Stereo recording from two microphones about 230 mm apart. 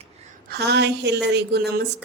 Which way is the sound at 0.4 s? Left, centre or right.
Right.